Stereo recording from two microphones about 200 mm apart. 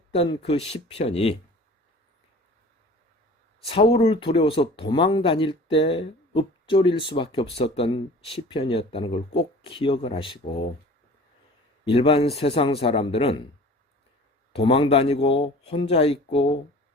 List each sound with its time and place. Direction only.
0.1 s speech: 30° left (ahead or behind)
3.7 s speech: 30° left (ahead or behind)
11.9 s speech: 30° left (ahead or behind)
14.5 s speech: 25° left (ahead or behind)